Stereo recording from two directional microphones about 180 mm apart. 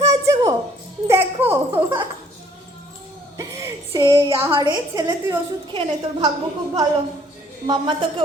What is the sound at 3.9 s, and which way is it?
A woman's voice, 20° right (ahead or behind).